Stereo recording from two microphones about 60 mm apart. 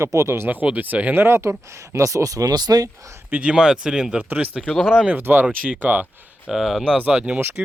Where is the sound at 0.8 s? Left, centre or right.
Right.